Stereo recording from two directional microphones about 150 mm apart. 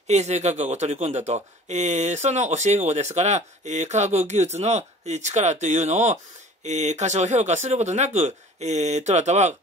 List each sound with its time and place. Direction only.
0.1 s speech: 50° right (ahead or behind)